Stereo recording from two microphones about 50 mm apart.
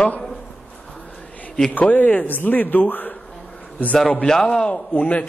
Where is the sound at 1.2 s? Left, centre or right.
Left.